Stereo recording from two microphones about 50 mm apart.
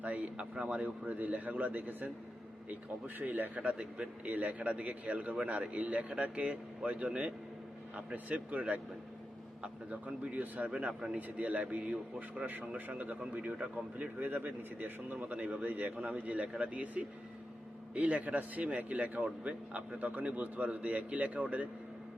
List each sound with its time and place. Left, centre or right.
0.0 s speech: right
3.2 s speech: right
9.9 s speech: right